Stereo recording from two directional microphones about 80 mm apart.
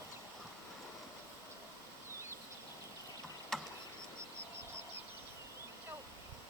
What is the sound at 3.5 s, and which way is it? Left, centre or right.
Tick, centre.